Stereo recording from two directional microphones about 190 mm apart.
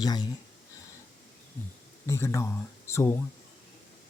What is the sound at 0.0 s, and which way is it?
Speech, 20° left (ahead or behind).